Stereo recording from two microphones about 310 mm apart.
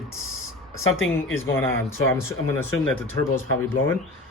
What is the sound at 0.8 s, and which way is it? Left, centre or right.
Speech, left.